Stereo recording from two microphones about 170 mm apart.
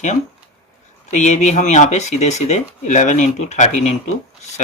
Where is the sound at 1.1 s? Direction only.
45° left (ahead or behind).